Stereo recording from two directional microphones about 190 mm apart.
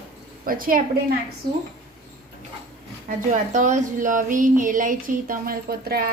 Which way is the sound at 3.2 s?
40° right (ahead or behind).